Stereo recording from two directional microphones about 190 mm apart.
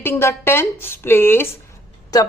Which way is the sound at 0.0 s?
15° left (ahead or behind).